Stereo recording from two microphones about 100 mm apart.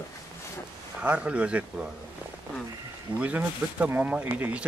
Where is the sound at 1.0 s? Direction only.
15° right (ahead or behind).